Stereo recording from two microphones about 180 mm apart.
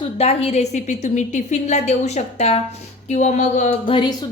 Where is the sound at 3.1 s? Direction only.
40° left (ahead or behind).